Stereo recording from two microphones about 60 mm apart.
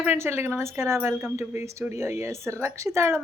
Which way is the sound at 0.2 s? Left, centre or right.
Right.